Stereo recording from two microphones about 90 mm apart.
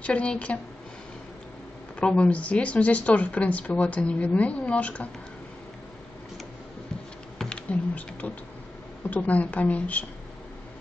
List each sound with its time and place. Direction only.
0.0 s speech: 15° left (ahead or behind)
2.0 s speech: 15° left (ahead or behind)
7.3 s typing: 10° left (ahead or behind)
9.1 s speech: 15° left (ahead or behind)